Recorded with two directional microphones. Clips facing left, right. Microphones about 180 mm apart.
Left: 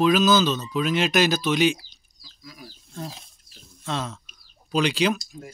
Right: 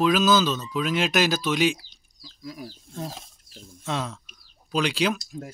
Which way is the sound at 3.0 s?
45° right (ahead or behind).